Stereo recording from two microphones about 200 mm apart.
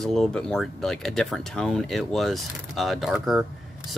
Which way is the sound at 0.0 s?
Centre (ahead or behind).